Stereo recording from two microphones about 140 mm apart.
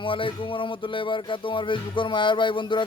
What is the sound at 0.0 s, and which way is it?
Speech, 40° left (ahead or behind).